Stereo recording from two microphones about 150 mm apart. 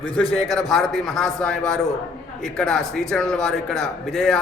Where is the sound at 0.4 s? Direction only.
Centre (ahead or behind).